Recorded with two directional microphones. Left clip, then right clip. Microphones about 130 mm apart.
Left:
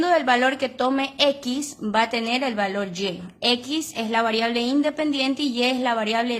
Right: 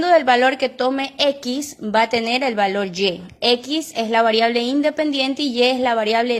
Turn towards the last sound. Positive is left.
turn(degrees=-25)  # may be behind; listen again after turning